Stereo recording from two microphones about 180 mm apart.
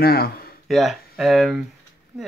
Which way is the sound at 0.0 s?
60° left (ahead or behind).